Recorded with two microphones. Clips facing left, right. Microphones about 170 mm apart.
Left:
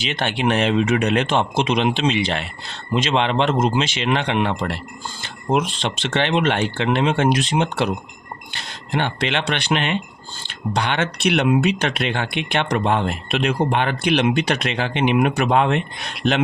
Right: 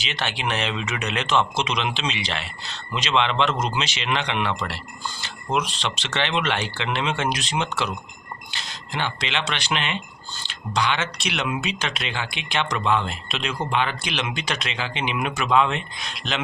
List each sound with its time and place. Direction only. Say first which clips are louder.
0.0 s a man's voice: left 7 dB; 50° left (ahead or behind)